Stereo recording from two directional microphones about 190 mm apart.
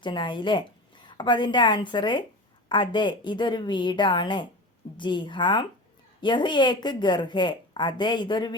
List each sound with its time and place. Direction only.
0.0 s a woman's voice: 25° left (ahead or behind)